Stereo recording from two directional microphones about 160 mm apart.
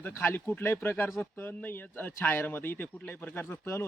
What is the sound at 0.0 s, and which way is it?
Speech, 15° left (ahead or behind).